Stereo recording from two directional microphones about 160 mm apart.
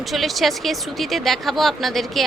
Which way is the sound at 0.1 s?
Centre (ahead or behind).